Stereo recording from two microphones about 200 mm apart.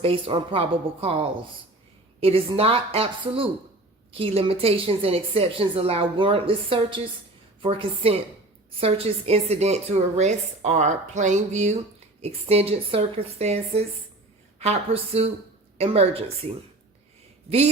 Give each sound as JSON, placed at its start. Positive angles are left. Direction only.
{"t": 0.0, "sound": "a woman's voice", "side_deg": -25}